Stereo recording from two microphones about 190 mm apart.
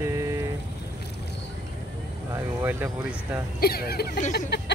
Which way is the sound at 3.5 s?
55° left (ahead or behind).